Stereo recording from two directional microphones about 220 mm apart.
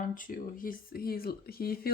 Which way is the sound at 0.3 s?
40° left (ahead or behind).